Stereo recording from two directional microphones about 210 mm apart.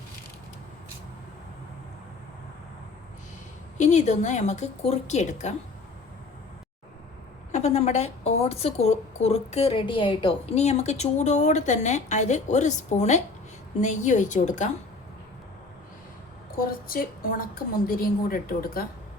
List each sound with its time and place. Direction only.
3.8 s a woman's voice: 35° left (ahead or behind)
7.5 s a woman's voice: 30° left (ahead or behind)
16.6 s a woman's voice: 40° left (ahead or behind)